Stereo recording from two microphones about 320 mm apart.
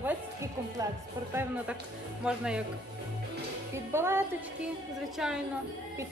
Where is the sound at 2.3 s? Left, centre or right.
Centre.